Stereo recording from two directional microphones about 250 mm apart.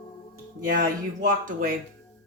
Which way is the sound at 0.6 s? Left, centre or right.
Right.